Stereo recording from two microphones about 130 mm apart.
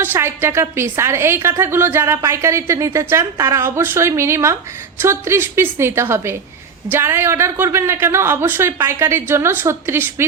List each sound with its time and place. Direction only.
0.0 s a woman's voice: 20° right (ahead or behind)